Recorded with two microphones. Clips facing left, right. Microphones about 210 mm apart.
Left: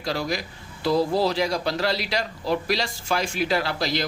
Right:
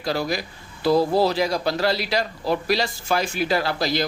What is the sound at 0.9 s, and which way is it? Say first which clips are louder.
Speech: right 3 dB; 60° right (ahead or behind).